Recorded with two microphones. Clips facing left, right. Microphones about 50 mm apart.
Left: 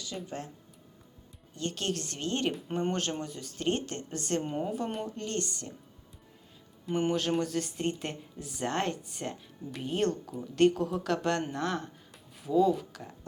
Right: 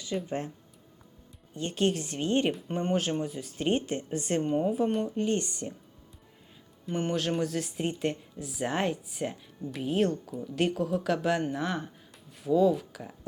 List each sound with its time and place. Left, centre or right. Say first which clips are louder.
0.3 s speech: right 6 dB; right
1.5 s speech: right 5 dB; centre
2.5 s speech: right 2 dB; centre
4.4 s speech: right 6 dB; centre
5.1 s speech: right 6 dB; centre
6.8 s speech: left 1 dB; centre